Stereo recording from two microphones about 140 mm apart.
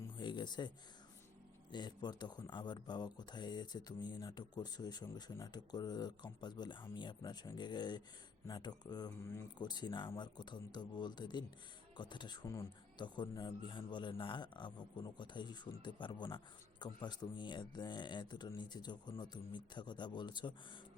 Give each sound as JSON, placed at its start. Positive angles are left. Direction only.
{"t": 0.2, "sound": "speech", "side_deg": 30}
{"t": 1.7, "sound": "speech", "side_deg": 30}